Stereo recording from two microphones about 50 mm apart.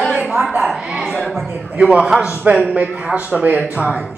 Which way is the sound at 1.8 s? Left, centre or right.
Right.